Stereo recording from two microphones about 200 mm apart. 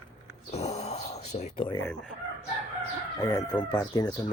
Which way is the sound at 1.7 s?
10° left (ahead or behind).